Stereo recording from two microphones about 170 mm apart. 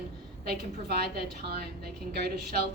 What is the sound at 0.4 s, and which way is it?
A woman's voice, 70° right (ahead or behind).